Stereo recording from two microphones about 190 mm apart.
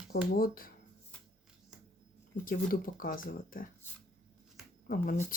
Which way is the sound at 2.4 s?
45° left (ahead or behind).